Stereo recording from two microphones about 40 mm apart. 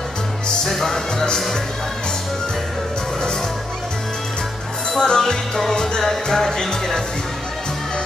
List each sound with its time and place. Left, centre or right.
0.7 s music: centre
4.9 s music: centre